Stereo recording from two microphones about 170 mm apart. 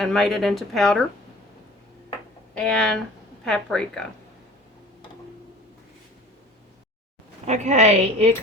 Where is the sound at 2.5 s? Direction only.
5° left (ahead or behind).